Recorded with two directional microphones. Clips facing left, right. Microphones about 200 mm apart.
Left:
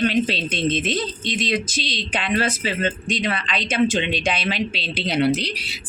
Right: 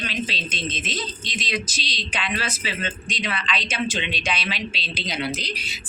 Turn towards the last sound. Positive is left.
turn(degrees=70)  # may be behind; listen again after turning